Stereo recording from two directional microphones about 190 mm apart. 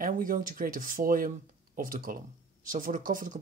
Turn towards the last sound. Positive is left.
turn(degrees=-45)  # may be behind; listen again after turning